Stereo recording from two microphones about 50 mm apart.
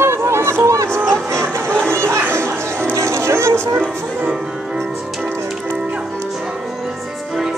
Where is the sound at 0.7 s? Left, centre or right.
Right.